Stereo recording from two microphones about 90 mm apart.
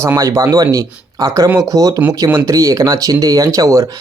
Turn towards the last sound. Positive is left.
turn(degrees=-35)  # may be behind; listen again after turning